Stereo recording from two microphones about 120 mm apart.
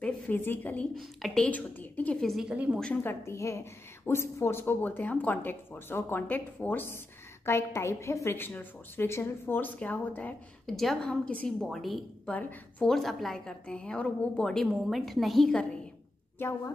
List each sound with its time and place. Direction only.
0.0 s a woman's voice: 15° left (ahead or behind)
0.9 s a woman's voice: 5° left (ahead or behind)
2.3 s a woman's voice: 10° right (ahead or behind)
2.8 s a woman's voice: 15° left (ahead or behind)
10.7 s a woman's voice: centre (ahead or behind)
12.3 s a woman's voice: 15° left (ahead or behind)
12.9 s a woman's voice: centre (ahead or behind)
16.3 s a woman's voice: 20° left (ahead or behind)